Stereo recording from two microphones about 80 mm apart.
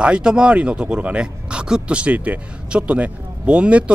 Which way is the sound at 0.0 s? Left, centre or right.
Centre.